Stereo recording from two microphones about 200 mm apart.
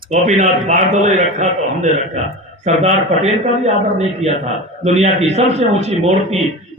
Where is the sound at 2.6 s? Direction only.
35° right (ahead or behind).